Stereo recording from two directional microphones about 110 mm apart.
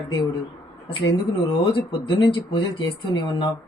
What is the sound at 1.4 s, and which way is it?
Speech, 45° left (ahead or behind).